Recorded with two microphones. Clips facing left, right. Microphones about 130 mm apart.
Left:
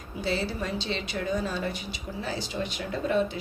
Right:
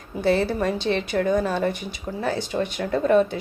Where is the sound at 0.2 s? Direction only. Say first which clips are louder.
Right 9 dB; 55° right (ahead or behind).